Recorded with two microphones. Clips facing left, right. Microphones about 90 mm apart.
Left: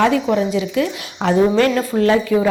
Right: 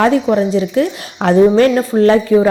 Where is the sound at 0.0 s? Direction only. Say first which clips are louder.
Right 3 dB; 35° right (ahead or behind).